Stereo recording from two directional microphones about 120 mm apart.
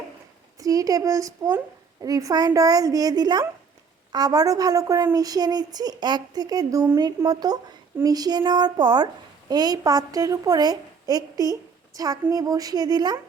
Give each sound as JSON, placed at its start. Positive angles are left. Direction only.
{"t": 0.6, "sound": "a woman's voice", "side_deg": -30}